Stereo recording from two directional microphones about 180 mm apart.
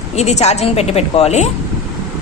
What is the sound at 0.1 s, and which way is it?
A woman's voice, 35° left (ahead or behind).